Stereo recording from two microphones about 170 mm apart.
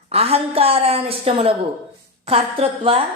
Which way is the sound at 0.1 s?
35° right (ahead or behind).